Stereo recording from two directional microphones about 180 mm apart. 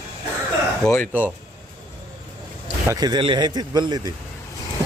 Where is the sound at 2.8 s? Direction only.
20° right (ahead or behind).